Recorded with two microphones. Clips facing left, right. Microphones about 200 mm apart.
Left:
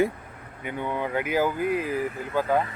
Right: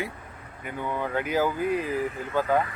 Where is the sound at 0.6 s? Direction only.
20° left (ahead or behind).